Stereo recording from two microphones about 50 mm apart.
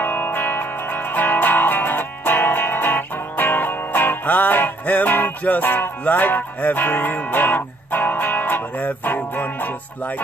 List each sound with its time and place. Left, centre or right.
0.0 s music: left